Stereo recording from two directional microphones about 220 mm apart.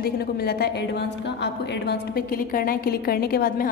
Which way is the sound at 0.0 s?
45° left (ahead or behind).